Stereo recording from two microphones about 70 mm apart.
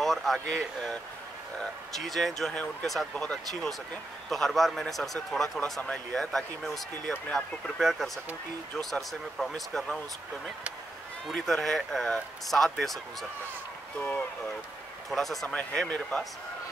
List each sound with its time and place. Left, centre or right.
0.0 s speech: centre
2.0 s speech: centre
9.5 s speech: centre
11.3 s speech: centre
13.9 s speech: left
15.0 s speech: centre
15.4 s speech: centre